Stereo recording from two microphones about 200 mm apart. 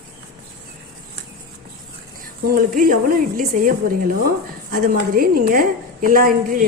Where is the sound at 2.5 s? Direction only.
45° right (ahead or behind).